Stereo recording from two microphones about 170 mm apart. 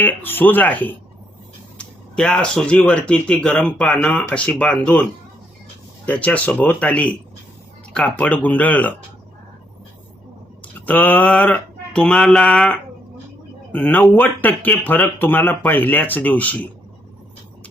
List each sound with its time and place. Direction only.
0.0 s speech: 10° left (ahead or behind)
6.1 s speech: 10° left (ahead or behind)
10.6 s speech: 10° left (ahead or behind)
13.7 s speech: 10° left (ahead or behind)